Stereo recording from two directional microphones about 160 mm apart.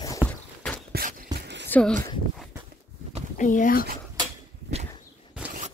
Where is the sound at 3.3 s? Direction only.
55° left (ahead or behind).